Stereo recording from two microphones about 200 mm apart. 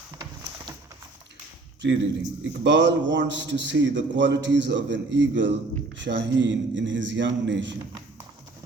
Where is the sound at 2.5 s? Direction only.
60° right (ahead or behind).